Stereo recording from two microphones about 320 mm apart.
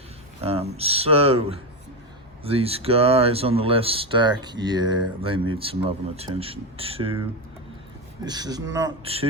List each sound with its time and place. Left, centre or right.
0.4 s speech: centre